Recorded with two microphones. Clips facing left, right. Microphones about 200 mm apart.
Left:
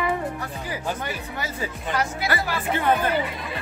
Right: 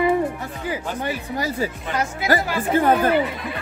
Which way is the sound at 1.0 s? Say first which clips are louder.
Right 6 dB; 35° right (ahead or behind).